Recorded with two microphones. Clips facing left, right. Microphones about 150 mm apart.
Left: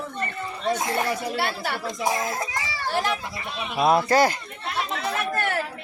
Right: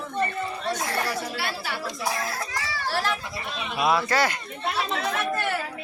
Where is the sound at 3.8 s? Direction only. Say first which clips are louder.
Left 4 dB; 40° left (ahead or behind).